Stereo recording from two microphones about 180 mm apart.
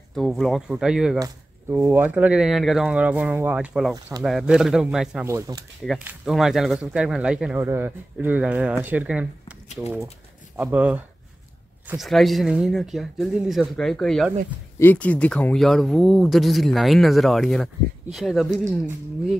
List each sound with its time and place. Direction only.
0.1 s speech: centre (ahead or behind)
5.2 s speech: 15° right (ahead or behind)
5.9 s speech: 5° right (ahead or behind)